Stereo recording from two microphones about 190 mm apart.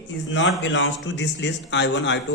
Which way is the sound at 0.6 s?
75° left (ahead or behind).